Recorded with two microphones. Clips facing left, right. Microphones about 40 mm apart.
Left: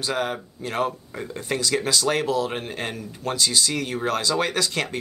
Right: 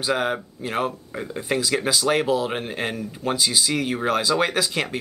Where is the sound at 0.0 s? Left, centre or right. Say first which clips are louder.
Right 3 dB; centre.